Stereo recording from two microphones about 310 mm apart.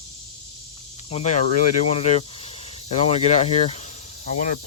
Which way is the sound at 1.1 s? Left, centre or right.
Centre.